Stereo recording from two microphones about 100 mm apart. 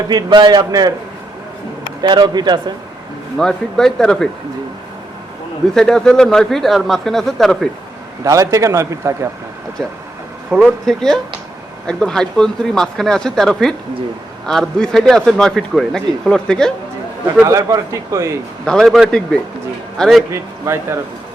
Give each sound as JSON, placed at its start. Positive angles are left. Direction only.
{"t": 0.1, "sound": "a man's voice", "side_deg": -45}
{"t": 2.0, "sound": "a man's voice", "side_deg": -45}
{"t": 3.3, "sound": "speech", "side_deg": 5}
{"t": 5.7, "sound": "speech", "side_deg": 5}
{"t": 8.2, "sound": "a man's voice", "side_deg": -35}
{"t": 10.6, "sound": "speech", "side_deg": 5}
{"t": 17.4, "sound": "a man's voice", "side_deg": -30}
{"t": 18.6, "sound": "speech", "side_deg": 5}
{"t": 20.3, "sound": "a man's voice", "side_deg": -30}